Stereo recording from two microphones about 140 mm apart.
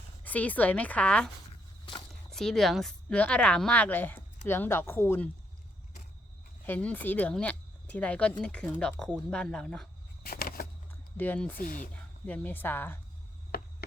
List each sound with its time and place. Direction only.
0.3 s speech: 10° left (ahead or behind)
2.3 s speech: 5° left (ahead or behind)
6.7 s speech: 10° left (ahead or behind)
10.2 s a sound: 90° left
11.2 s speech: 10° left (ahead or behind)
11.5 s speech: 85° left
12.2 s speech: 10° left (ahead or behind)